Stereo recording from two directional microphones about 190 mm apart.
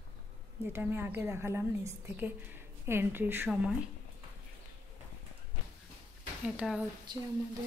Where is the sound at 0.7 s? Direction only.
10° right (ahead or behind).